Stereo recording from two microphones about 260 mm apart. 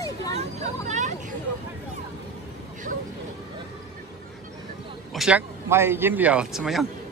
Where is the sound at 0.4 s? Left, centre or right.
Right.